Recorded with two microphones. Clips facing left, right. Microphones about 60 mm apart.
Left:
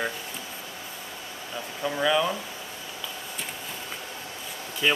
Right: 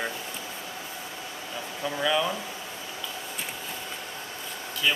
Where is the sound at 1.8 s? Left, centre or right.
Centre.